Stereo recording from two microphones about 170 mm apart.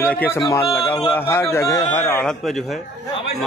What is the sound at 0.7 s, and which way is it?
Speech, 30° left (ahead or behind).